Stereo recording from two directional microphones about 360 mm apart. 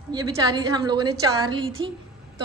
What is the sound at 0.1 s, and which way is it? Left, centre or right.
A woman's voice, centre.